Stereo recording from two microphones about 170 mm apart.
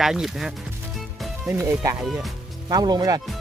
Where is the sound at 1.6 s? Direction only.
20° right (ahead or behind).